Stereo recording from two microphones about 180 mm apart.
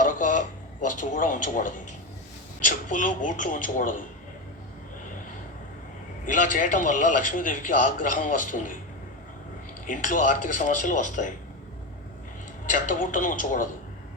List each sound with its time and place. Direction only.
0.1 s a sound: 45° left (ahead or behind)
0.8 s a man's voice: 45° left (ahead or behind)
6.2 s a man's voice: 45° left (ahead or behind)
9.8 s a man's voice: 45° left (ahead or behind)
12.6 s a man's voice: 45° left (ahead or behind)